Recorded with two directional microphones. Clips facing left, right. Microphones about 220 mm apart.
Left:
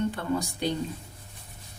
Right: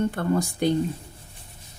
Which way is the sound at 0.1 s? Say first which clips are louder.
Right 5 dB; 50° right (ahead or behind).